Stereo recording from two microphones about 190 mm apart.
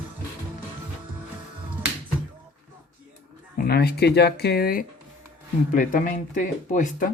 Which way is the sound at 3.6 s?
55° left (ahead or behind).